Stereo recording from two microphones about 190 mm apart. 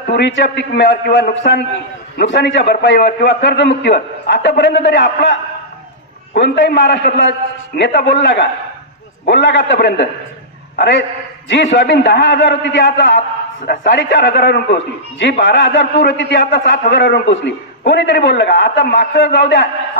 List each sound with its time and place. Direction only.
0.0 s a man's voice: 65° left (ahead or behind)
6.3 s a man's voice: 65° left (ahead or behind)